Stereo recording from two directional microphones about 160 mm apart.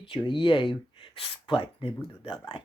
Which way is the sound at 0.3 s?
30° left (ahead or behind).